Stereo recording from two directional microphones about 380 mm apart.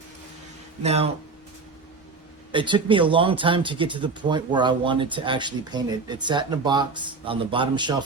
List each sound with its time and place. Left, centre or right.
0.8 s speech: centre
2.5 s speech: centre